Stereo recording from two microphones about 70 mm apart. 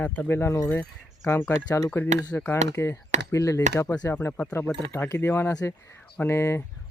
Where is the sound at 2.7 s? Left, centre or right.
Left.